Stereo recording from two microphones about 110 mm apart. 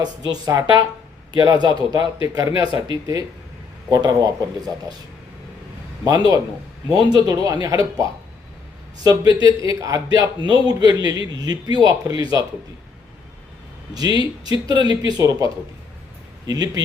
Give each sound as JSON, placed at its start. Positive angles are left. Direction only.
{"t": 0.3, "sound": "a man's voice", "side_deg": -35}
{"t": 6.1, "sound": "a man's voice", "side_deg": -35}
{"t": 13.9, "sound": "a man's voice", "side_deg": -35}
{"t": 16.5, "sound": "a man's voice", "side_deg": -35}